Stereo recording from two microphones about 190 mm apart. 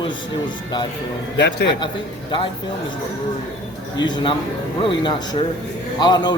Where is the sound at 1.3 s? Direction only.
60° left (ahead or behind).